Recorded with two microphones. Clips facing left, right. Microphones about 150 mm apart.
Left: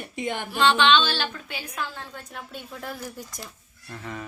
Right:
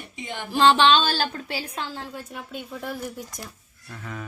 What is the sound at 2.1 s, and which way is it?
Speech, 5° right (ahead or behind).